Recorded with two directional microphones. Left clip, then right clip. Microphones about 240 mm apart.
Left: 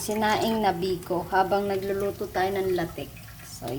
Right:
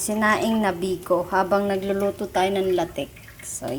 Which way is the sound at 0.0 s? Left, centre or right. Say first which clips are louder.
Right 3 dB; centre.